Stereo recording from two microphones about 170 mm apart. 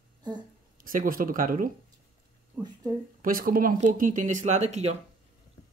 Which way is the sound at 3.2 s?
55° right (ahead or behind).